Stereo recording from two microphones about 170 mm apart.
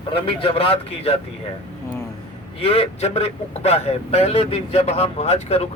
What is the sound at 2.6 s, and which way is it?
Speech, 35° left (ahead or behind).